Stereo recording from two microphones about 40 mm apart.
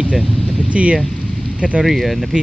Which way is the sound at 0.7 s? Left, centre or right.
Right.